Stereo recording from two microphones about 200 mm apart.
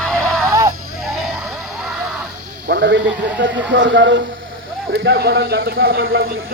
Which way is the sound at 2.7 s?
55° right (ahead or behind).